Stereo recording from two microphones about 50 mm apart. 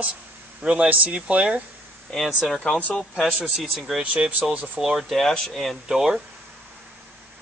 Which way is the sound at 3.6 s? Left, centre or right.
Centre.